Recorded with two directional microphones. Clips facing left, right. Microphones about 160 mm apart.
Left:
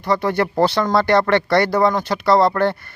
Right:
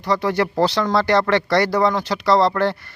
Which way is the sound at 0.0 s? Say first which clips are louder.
Left 1 dB; 55° left (ahead or behind).